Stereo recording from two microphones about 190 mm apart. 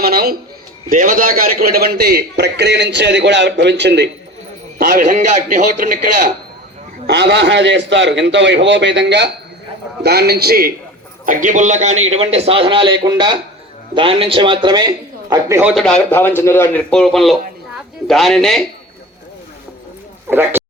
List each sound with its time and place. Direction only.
0.0 s a man's voice: 50° right (ahead or behind)
4.8 s a man's voice: 50° right (ahead or behind)
7.1 s a man's voice: 65° right (ahead or behind)
11.3 s a man's voice: 40° right (ahead or behind); by 15.7 s 15° right (ahead or behind)
15.7 s a man's voice: 5° left (ahead or behind)
20.3 s speech: 10° right (ahead or behind)